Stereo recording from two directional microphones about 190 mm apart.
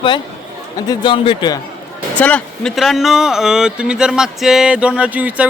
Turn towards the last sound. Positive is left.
turn(degrees=-10)  # may be behind; listen again after turning